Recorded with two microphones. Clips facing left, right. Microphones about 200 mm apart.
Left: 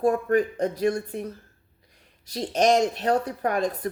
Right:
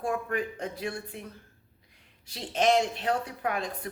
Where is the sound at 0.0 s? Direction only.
40° left (ahead or behind).